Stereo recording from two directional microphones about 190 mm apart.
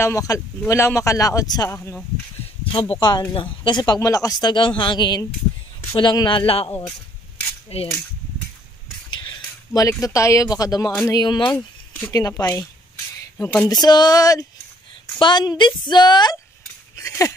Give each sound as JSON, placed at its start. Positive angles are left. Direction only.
{"t": 0.0, "sound": "speech", "side_deg": 15}
{"t": 1.8, "sound": "speech", "side_deg": 5}
{"t": 2.6, "sound": "speech", "side_deg": 30}
{"t": 7.7, "sound": "cap gun", "side_deg": 35}
{"t": 9.7, "sound": "speech", "side_deg": 15}
{"t": 13.7, "sound": "speech", "side_deg": 20}
{"t": 16.9, "sound": "a sound", "side_deg": 15}